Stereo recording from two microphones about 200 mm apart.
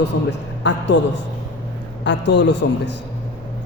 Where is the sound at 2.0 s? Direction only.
60° left (ahead or behind).